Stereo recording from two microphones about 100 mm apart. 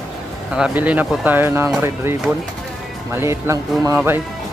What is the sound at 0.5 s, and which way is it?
Speech, 10° right (ahead or behind).